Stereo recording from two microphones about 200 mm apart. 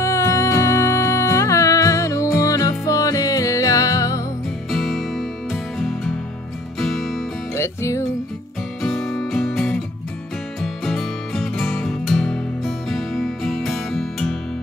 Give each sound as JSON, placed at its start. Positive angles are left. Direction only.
{"t": 0.0, "sound": "music", "side_deg": 15}
{"t": 4.6, "sound": "music", "side_deg": 0}
{"t": 7.5, "sound": "music", "side_deg": 15}
{"t": 8.8, "sound": "music", "side_deg": 0}